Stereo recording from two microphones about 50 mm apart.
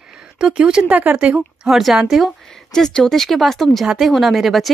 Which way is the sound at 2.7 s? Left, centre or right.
Centre.